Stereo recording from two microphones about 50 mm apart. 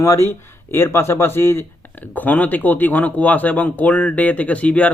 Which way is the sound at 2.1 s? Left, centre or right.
Left.